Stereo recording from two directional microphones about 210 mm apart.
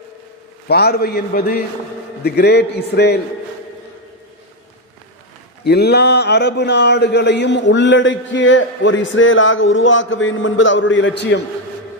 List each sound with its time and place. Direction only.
0.7 s a man's voice: 50° left (ahead or behind)
5.6 s speech: 50° left (ahead or behind)